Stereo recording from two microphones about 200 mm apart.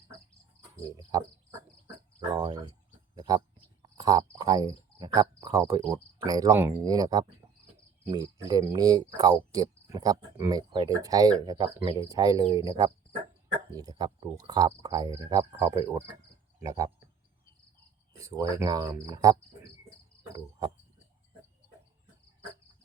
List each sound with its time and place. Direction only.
0.9 s insect: 20° right (ahead or behind)
2.3 s cricket: 20° right (ahead or behind)
3.2 s speech: 20° right (ahead or behind)
3.8 s cricket: 15° right (ahead or behind)
6.1 s speech: 20° right (ahead or behind)
8.1 s cricket: 20° right (ahead or behind)
16.6 s speech: 20° right (ahead or behind)
18.2 s cricket: 15° right (ahead or behind)